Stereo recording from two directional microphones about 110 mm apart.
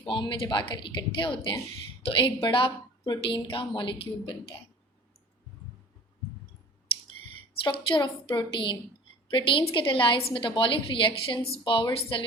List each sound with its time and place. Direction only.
0.1 s a woman's voice: 45° left (ahead or behind)
7.6 s a woman's voice: 50° left (ahead or behind)